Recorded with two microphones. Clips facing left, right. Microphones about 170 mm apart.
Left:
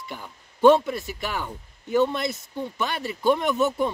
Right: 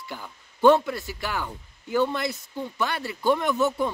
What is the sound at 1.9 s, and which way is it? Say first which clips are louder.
Speech: left 2 dB; 20° left (ahead or behind).